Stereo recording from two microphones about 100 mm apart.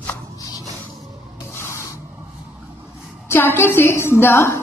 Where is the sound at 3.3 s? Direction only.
25° left (ahead or behind).